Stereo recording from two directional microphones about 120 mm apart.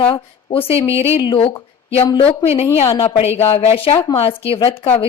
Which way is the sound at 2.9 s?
25° left (ahead or behind).